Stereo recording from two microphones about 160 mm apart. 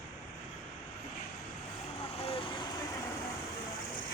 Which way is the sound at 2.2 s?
35° left (ahead or behind).